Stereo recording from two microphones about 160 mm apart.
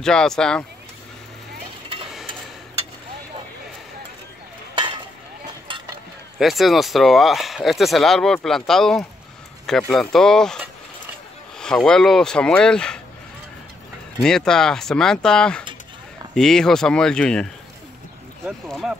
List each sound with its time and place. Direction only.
0.0 s speech: 5° left (ahead or behind)
4.7 s stir: 30° right (ahead or behind)
6.3 s speech: centre (ahead or behind)
11.6 s speech: 5° left (ahead or behind)
14.2 s speech: 5° left (ahead or behind)
18.7 s speech: centre (ahead or behind)